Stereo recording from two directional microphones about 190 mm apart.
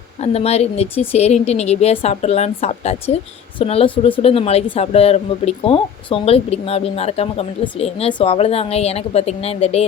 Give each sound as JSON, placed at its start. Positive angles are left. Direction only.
{"t": 0.2, "sound": "speech", "side_deg": 35}